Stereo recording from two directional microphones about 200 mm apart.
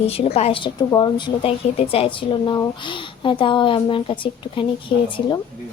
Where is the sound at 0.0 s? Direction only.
30° left (ahead or behind).